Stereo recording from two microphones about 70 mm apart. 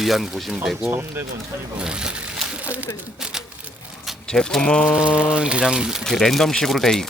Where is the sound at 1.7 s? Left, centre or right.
Centre.